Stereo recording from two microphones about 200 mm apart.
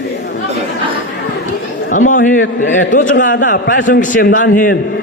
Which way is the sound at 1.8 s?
40° left (ahead or behind).